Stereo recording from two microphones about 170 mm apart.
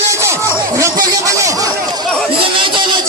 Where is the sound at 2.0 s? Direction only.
5° left (ahead or behind).